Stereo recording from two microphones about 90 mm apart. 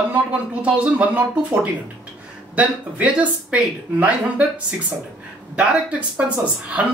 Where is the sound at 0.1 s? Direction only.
15° right (ahead or behind).